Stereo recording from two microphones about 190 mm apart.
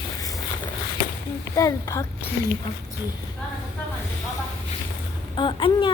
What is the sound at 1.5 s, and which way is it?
Speech, 15° left (ahead or behind).